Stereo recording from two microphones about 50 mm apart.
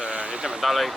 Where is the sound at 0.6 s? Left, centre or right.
Centre.